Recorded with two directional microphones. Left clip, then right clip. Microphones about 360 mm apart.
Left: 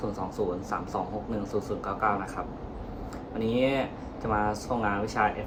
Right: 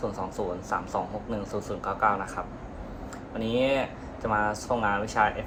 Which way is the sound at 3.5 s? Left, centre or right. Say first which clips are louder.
Right 2 dB; centre.